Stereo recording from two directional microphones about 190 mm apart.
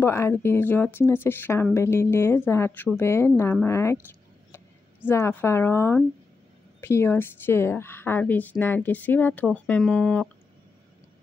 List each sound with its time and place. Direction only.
0.0 s speech: 15° left (ahead or behind)
3.6 s a sound: 15° left (ahead or behind)
5.0 s speech: 10° left (ahead or behind)